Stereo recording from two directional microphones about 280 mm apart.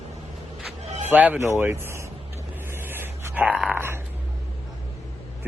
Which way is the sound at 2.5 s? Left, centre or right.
Centre.